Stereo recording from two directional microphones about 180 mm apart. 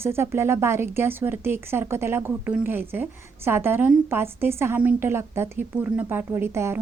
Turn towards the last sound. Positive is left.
turn(degrees=-15)  # may be behind; listen again after turning